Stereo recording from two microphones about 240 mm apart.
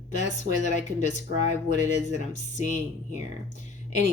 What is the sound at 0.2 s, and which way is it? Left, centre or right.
Speech, left.